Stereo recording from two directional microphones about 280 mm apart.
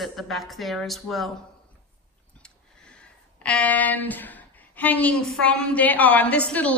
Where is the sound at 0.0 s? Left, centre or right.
Centre.